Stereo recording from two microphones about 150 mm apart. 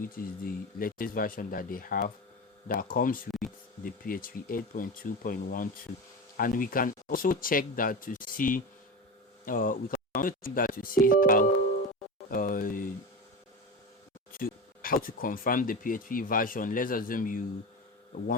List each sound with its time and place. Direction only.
0.0 s speech: 70° left (ahead or behind)
14.3 s speech: 70° left (ahead or behind)